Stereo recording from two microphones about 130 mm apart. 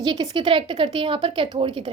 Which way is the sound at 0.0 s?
35° right (ahead or behind).